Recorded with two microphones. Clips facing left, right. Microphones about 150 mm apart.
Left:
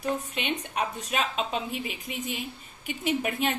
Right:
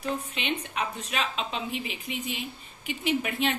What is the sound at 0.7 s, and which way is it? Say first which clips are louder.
A woman's voice: left 2 dB; 45° left (ahead or behind).